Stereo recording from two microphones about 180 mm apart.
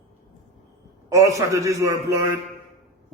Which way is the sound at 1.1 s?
20° right (ahead or behind).